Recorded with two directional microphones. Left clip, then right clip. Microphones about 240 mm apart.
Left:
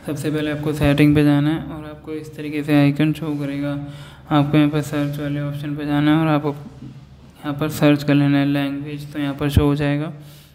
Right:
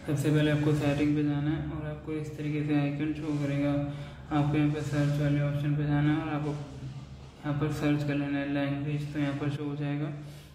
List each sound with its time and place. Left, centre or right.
0.0 s a man's voice: left
7.4 s a man's voice: left